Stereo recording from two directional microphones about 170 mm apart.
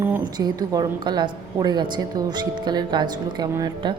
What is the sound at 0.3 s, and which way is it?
A woman's voice, 25° right (ahead or behind).